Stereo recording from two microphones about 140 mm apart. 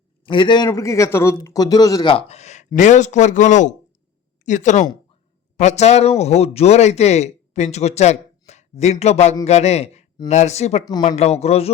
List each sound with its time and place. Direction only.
0.3 s a man's voice: 35° left (ahead or behind)
0.7 s speech: 20° left (ahead or behind)
2.1 s speech: 45° left (ahead or behind)
10.8 s speech: 30° left (ahead or behind)
11.1 s speech: 50° left (ahead or behind)